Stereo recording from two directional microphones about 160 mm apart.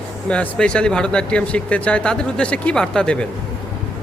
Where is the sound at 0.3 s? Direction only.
5° left (ahead or behind).